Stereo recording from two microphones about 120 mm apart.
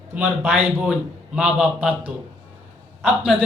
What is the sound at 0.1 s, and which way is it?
A man's voice, 10° right (ahead or behind).